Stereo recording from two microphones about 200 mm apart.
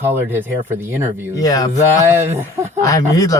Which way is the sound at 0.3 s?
10° right (ahead or behind).